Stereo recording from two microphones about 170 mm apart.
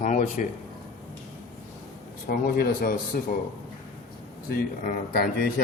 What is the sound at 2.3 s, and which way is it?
Speech, 60° left (ahead or behind).